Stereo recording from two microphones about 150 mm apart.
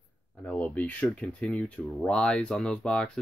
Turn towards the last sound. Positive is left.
turn(degrees=5)  # may be behind; listen again after turning